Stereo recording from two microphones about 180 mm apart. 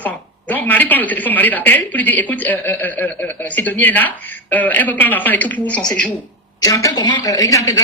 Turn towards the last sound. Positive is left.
turn(degrees=20)  # may be behind; listen again after turning